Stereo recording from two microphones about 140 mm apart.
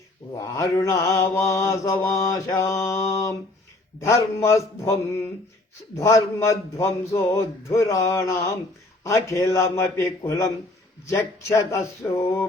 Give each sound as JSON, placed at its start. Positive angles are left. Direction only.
{"t": 0.3, "sound": "mantra", "side_deg": 25}